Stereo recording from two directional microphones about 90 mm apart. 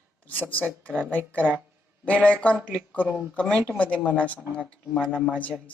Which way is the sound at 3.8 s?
15° left (ahead or behind).